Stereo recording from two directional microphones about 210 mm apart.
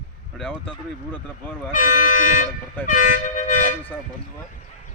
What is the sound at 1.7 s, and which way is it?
Speech, 35° left (ahead or behind).